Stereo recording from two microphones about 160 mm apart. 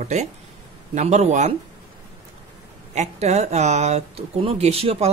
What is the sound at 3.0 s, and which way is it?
Speech, 45° right (ahead or behind).